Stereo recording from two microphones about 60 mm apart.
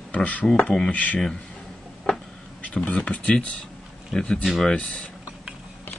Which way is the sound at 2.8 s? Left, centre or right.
Centre.